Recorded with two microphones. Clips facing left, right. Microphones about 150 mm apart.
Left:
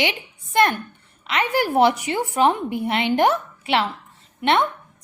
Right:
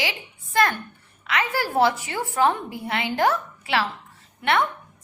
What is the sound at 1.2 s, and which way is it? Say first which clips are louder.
A woman's voice: left 4 dB; 20° left (ahead or behind).